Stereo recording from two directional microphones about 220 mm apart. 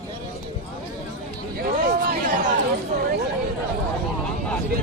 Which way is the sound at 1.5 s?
45° right (ahead or behind).